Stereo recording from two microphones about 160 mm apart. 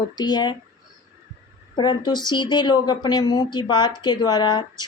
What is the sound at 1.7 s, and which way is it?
Speech, 25° left (ahead or behind).